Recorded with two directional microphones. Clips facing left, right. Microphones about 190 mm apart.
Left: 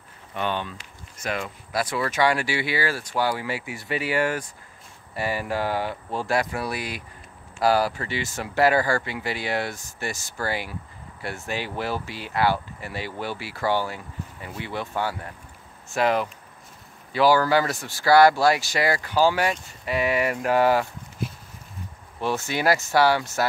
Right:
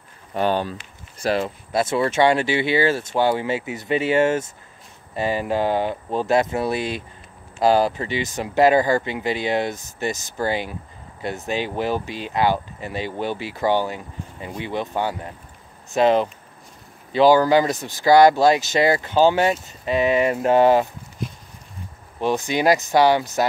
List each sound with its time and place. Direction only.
0.3 s speech: 40° right (ahead or behind); by 20.9 s 20° right (ahead or behind)
22.2 s speech: 15° right (ahead or behind)